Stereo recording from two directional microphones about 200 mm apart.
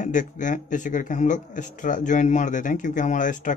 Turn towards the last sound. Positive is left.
turn(degrees=40)  # may be behind; listen again after turning